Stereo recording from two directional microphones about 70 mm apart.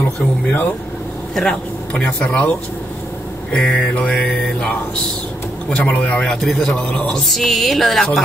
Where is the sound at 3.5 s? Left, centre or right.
Centre.